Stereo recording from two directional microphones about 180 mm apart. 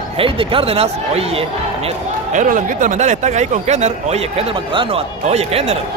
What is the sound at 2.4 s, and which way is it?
Speech, 45° right (ahead or behind).